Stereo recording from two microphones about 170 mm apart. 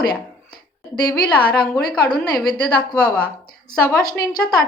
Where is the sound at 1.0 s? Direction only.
65° left (ahead or behind).